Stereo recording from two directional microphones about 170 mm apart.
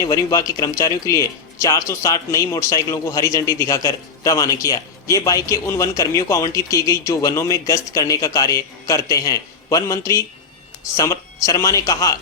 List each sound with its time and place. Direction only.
0.0 s speech: 20° left (ahead or behind)